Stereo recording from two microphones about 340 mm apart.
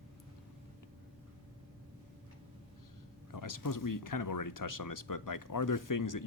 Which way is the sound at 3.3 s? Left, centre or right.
Left.